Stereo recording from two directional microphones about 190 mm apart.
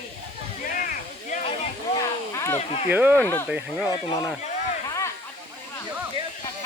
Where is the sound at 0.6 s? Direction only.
45° left (ahead or behind).